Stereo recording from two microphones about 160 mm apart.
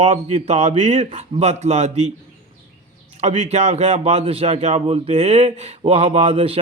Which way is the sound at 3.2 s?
40° right (ahead or behind).